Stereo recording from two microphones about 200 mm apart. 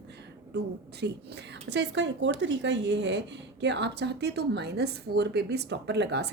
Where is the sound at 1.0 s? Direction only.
55° right (ahead or behind).